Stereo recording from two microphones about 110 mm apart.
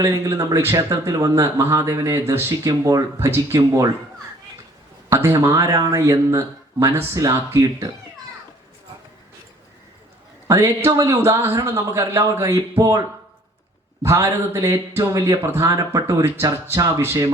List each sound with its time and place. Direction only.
0.0 s speech: 30° right (ahead or behind)
5.2 s speech: 30° right (ahead or behind)
10.8 s speech: 25° right (ahead or behind)
14.0 s speech: 25° right (ahead or behind)